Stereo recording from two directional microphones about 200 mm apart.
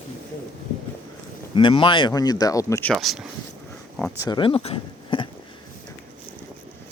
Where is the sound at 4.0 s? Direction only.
15° left (ahead or behind).